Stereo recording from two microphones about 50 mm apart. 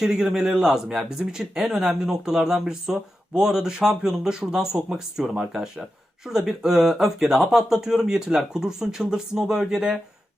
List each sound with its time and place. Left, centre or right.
0.0 s speech: centre